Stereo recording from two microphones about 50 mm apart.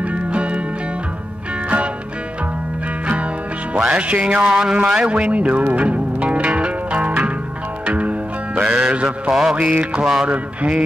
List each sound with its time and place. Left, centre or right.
0.0 s music: right
3.7 s music: right
9.3 s music: centre
9.6 s music: right